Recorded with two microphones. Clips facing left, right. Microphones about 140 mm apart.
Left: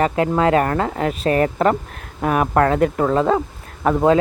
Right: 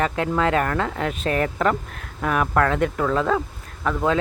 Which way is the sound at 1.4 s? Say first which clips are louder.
Left 4 dB; 35° left (ahead or behind).